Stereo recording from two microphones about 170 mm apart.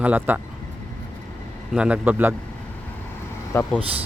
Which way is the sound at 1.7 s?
10° right (ahead or behind).